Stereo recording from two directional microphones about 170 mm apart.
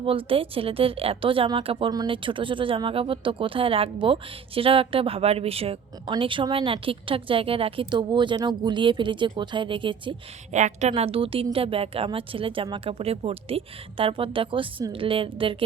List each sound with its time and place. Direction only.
0.0 s a woman's voice: 35° right (ahead or behind)
10.5 s a woman's voice: 45° right (ahead or behind)